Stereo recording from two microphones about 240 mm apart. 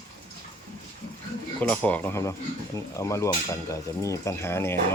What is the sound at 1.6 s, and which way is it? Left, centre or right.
Speech, centre.